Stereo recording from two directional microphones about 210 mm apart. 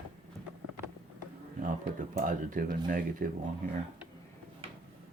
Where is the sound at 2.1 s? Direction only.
40° right (ahead or behind).